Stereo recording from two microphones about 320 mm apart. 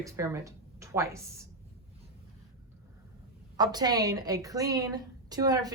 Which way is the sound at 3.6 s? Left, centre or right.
Centre.